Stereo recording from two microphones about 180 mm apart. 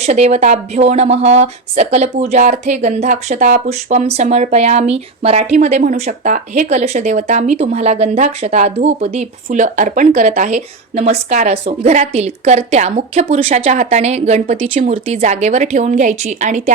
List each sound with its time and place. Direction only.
0.0 s speech: 35° right (ahead or behind)